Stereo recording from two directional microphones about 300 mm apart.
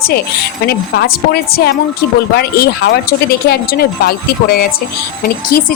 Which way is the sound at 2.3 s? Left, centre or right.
Left.